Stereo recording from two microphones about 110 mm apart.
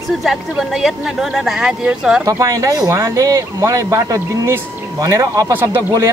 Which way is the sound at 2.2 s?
30° right (ahead or behind).